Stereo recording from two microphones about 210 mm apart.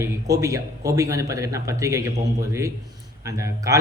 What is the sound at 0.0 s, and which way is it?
A man's voice, 15° right (ahead or behind).